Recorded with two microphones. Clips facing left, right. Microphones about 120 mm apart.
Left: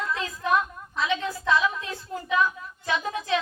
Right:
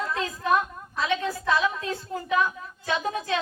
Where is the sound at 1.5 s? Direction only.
30° right (ahead or behind).